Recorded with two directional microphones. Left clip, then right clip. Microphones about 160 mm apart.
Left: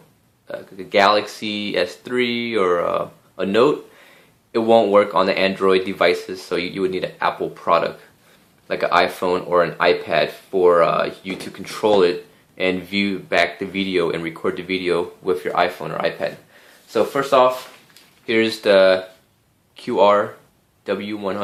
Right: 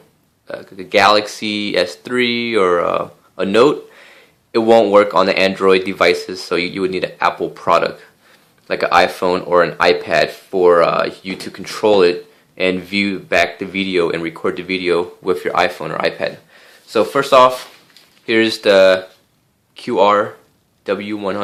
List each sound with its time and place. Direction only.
0.4 s speech: 30° right (ahead or behind)
18.3 s speech: 25° right (ahead or behind)